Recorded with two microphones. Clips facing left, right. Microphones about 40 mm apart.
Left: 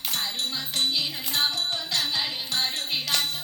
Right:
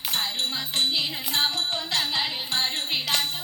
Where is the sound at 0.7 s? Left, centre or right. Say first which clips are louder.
Right 1 dB; right.